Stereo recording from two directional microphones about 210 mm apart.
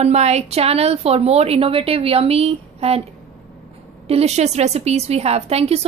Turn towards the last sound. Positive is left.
turn(degrees=-30)  # may be behind; listen again after turning